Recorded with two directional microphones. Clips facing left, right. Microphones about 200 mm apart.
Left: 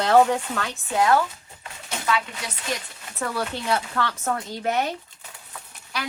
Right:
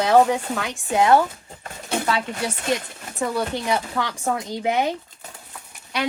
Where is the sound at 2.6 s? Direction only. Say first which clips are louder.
Right 3 dB; 20° right (ahead or behind).